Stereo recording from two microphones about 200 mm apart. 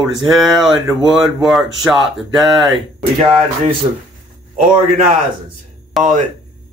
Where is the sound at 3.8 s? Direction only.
25° right (ahead or behind).